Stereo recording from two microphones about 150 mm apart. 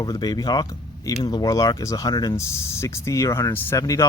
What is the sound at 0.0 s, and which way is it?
Speech, 25° left (ahead or behind).